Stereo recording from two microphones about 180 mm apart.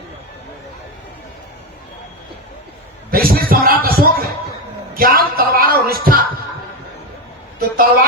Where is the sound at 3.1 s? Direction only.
55° right (ahead or behind).